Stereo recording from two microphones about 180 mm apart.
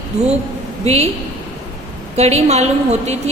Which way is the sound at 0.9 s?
35° right (ahead or behind).